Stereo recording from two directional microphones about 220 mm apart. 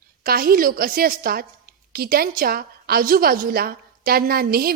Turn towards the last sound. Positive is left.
turn(degrees=-45)  # may be behind; listen again after turning